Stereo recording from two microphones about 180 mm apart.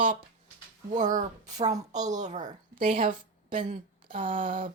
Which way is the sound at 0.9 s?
45° right (ahead or behind).